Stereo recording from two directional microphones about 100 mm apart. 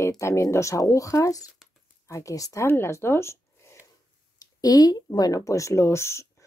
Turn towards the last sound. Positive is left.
turn(degrees=25)  # may be behind; listen again after turning